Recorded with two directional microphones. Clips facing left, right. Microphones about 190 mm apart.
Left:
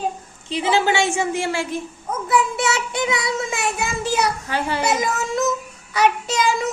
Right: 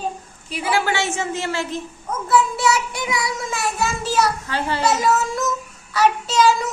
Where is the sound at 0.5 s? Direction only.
20° left (ahead or behind).